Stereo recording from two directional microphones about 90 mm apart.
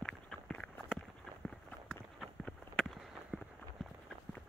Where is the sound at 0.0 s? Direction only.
10° left (ahead or behind).